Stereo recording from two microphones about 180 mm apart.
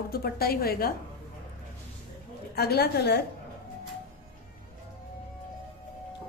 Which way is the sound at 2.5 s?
60° left (ahead or behind).